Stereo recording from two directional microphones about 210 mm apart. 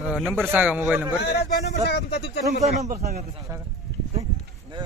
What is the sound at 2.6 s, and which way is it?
Speech, 30° right (ahead or behind).